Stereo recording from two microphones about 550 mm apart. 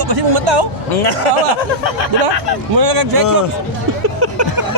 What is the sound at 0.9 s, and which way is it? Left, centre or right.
Speech, left.